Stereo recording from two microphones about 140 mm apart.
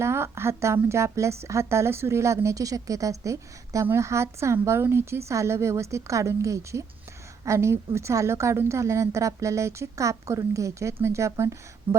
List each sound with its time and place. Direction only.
0.0 s speech: 20° right (ahead or behind)